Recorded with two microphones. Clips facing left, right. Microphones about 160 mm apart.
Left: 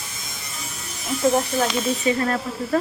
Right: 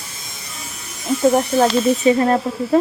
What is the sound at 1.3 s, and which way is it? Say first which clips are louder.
Speech: right 6 dB; 30° right (ahead or behind).